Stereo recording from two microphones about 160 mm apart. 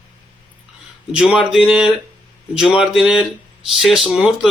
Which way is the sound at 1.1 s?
5° right (ahead or behind).